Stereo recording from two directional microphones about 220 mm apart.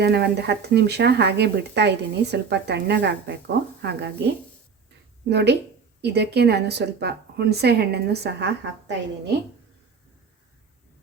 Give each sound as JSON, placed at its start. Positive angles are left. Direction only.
{"t": 0.0, "sound": "a woman's voice", "side_deg": -50}
{"t": 5.3, "sound": "a woman's voice", "side_deg": -50}